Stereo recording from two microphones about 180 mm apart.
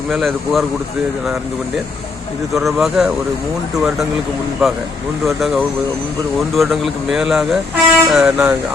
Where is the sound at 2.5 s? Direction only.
Centre (ahead or behind).